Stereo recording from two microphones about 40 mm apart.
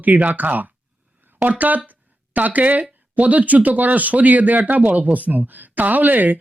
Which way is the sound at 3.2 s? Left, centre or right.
Right.